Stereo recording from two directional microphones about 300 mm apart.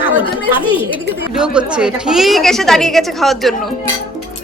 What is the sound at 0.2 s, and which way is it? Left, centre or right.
Speech, centre.